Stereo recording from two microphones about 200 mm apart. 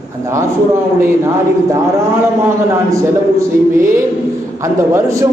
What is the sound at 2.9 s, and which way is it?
A man's voice, 15° right (ahead or behind).